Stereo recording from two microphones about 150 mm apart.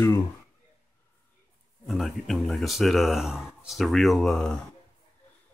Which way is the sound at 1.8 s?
Centre (ahead or behind).